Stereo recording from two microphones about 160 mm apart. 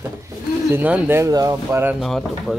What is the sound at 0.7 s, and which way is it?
Speech, 10° right (ahead or behind).